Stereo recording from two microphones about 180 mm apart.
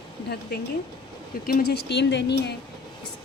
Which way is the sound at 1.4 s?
55° left (ahead or behind).